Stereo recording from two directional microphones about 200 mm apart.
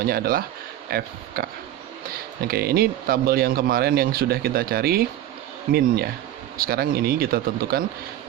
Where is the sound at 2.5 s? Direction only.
50° right (ahead or behind).